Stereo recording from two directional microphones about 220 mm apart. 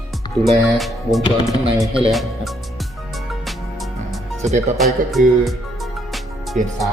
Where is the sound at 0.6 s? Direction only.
Centre (ahead or behind).